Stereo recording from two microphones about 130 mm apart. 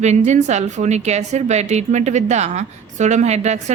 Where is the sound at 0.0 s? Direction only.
60° right (ahead or behind).